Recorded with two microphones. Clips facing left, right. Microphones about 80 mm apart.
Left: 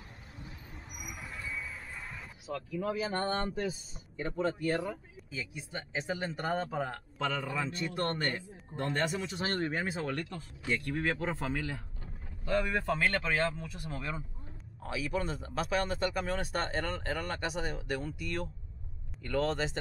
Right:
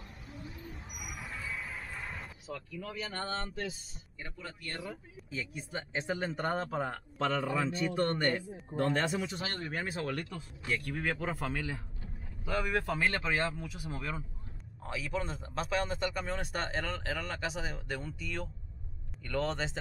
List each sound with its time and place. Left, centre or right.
0.9 s music: centre
1.6 s a sound: right
2.4 s speech: centre
2.9 s speech: centre
4.8 s speech: centre